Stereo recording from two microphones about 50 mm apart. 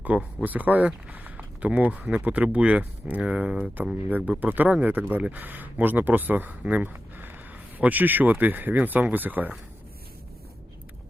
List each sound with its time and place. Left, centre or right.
0.0 s speech: right
4.4 s speech: right
6.9 s a sound: right
7.8 s speech: right